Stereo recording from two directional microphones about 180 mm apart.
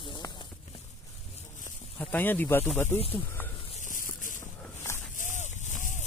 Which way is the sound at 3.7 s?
45° left (ahead or behind).